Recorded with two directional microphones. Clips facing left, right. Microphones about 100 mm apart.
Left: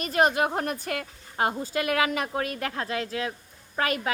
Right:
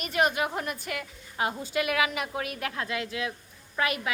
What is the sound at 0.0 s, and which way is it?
A woman's voice, 35° left (ahead or behind).